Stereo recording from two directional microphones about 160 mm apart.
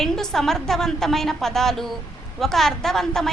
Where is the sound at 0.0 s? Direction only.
5° left (ahead or behind).